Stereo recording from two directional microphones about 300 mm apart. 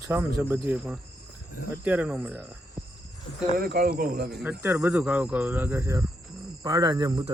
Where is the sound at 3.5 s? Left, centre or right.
Right.